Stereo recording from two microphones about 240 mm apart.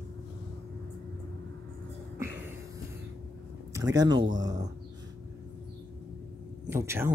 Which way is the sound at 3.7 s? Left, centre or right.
Centre.